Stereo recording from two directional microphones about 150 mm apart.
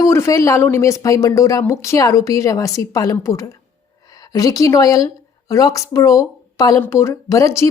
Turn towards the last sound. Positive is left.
turn(degrees=20)  # may be behind; listen again after turning